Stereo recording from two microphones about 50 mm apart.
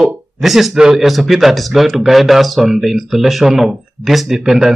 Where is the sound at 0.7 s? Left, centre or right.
Centre.